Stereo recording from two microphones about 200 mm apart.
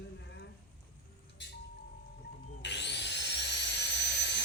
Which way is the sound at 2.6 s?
60° left (ahead or behind).